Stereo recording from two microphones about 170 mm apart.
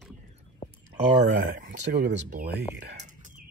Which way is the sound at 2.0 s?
75° right (ahead or behind).